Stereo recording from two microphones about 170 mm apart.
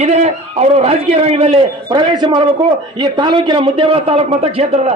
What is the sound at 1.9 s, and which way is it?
A man's voice, 25° right (ahead or behind).